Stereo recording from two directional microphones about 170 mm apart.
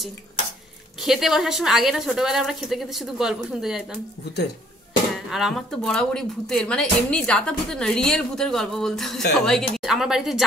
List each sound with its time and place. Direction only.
1.0 s speech: centre (ahead or behind)
5.1 s speech: centre (ahead or behind)